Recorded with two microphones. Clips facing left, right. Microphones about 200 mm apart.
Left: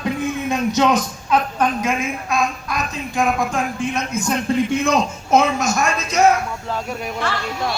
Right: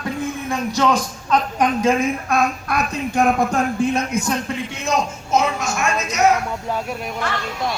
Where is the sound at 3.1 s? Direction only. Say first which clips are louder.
Right 2 dB; 40° right (ahead or behind).